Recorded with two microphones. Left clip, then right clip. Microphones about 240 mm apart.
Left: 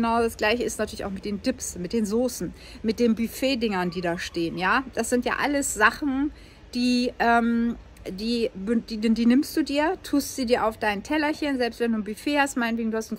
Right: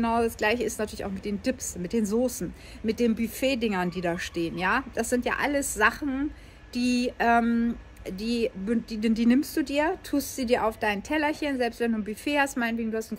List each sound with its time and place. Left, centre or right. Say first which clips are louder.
0.0 s speech: left 2 dB; centre